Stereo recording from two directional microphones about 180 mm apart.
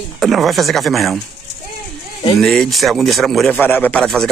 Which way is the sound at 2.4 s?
5° left (ahead or behind).